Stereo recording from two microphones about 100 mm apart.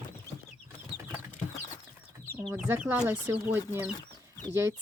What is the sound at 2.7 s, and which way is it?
Speech, 15° right (ahead or behind).